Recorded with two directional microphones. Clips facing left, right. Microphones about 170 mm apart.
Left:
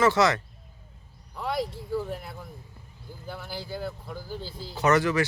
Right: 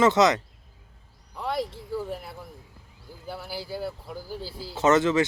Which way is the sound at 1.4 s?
Centre (ahead or behind).